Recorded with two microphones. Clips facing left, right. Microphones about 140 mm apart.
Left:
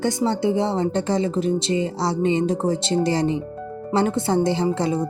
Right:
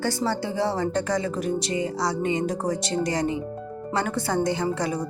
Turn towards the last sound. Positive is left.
turn(degrees=25)  # may be behind; listen again after turning